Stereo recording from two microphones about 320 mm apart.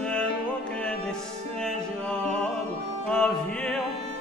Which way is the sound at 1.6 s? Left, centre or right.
Centre.